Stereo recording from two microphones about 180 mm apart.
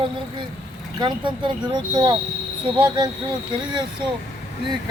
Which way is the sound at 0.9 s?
25° right (ahead or behind).